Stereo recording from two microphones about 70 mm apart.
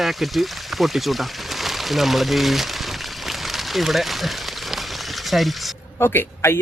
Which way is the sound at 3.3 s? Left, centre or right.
Centre.